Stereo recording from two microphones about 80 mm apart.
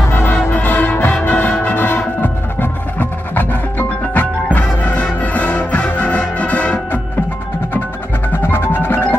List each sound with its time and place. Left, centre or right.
0.0 s music: left
8.3 s music: left